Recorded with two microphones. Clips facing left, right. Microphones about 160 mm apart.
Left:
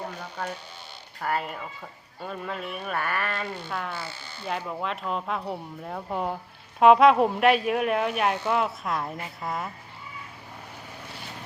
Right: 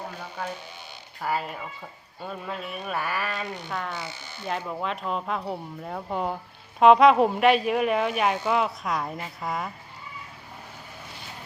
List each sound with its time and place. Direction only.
0.4 s speech: 5° right (ahead or behind)
3.7 s speech: centre (ahead or behind)
3.9 s speech: 20° right (ahead or behind)
4.4 s speech: centre (ahead or behind)